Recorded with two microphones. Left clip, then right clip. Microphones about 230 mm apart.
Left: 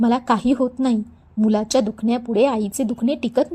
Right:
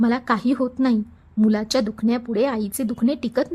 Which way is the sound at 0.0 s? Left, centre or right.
Centre.